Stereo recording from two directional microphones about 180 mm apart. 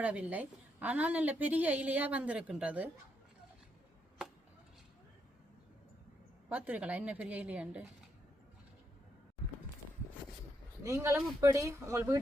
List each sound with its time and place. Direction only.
0.0 s a woman's voice: 10° right (ahead or behind)
6.5 s a woman's voice: 10° right (ahead or behind)
10.8 s a woman's voice: 15° right (ahead or behind)